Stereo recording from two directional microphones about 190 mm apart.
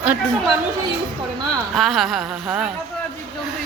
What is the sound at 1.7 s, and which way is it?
Speech, centre (ahead or behind).